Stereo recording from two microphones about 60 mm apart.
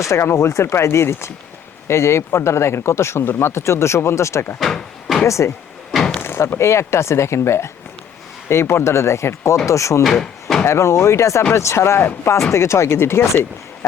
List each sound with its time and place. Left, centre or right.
0.1 s speech: left
4.6 s speech: centre
5.2 s speech: left
5.9 s a sound: centre
6.1 s speech: left
10.0 s a sound: centre
10.7 s speech: left